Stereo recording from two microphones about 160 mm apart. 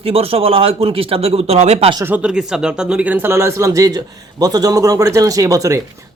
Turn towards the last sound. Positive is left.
turn(degrees=-20)  # may be behind; listen again after turning